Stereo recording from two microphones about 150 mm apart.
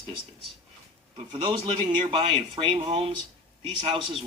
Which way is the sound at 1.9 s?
35° right (ahead or behind).